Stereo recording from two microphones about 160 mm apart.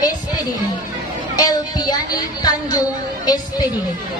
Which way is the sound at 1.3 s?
25° left (ahead or behind).